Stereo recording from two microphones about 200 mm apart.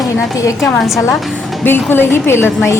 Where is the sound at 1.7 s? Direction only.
10° left (ahead or behind).